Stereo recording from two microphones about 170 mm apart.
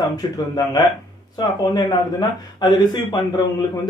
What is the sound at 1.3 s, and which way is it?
Speech, 25° left (ahead or behind).